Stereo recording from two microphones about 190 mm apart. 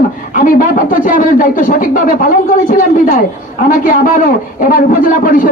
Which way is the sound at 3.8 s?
45° left (ahead or behind).